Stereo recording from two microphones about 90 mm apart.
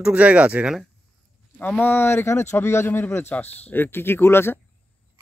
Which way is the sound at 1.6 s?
20° left (ahead or behind).